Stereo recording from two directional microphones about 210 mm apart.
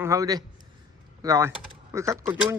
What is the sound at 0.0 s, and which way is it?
A man's voice, 15° right (ahead or behind).